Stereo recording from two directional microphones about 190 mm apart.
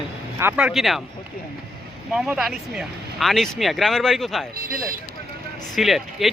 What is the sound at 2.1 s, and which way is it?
Speech, 5° right (ahead or behind).